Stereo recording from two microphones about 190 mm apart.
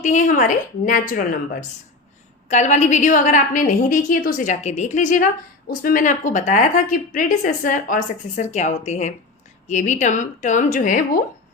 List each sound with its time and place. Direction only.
0.0 s a woman's voice: 40° left (ahead or behind)
2.5 s a woman's voice: 40° left (ahead or behind)